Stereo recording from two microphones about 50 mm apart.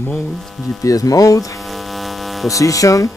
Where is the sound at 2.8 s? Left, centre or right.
Left.